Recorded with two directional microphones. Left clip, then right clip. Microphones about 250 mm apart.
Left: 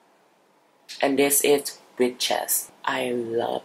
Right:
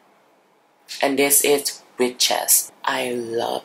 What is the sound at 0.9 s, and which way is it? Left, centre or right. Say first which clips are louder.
Speech: right 2 dB; centre.